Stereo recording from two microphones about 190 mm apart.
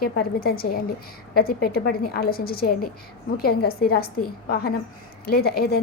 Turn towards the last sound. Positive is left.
turn(degrees=55)  # may be behind; listen again after turning